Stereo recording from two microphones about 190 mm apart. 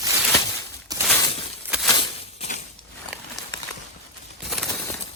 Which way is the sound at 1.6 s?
5° right (ahead or behind).